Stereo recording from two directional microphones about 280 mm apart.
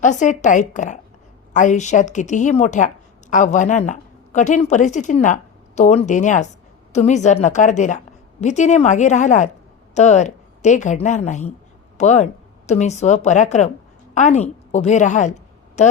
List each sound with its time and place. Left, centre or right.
0.0 s a woman's voice: left